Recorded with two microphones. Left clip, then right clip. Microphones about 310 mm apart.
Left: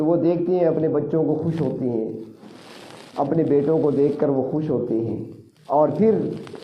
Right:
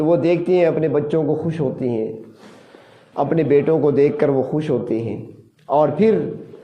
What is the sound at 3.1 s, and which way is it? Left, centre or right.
A man's voice, right.